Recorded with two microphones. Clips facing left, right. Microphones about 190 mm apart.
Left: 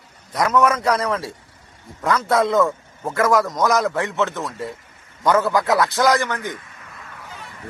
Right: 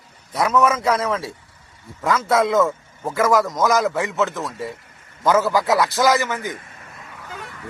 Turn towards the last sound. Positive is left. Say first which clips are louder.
# even
turn(degrees=-5)  # may be behind; listen again after turning